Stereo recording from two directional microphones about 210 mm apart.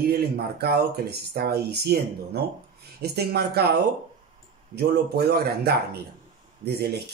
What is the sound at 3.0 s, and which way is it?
Speech, 50° right (ahead or behind).